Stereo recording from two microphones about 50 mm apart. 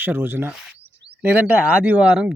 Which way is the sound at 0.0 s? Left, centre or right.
Right.